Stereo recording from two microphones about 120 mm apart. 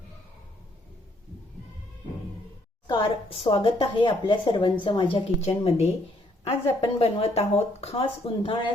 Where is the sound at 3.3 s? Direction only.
50° left (ahead or behind).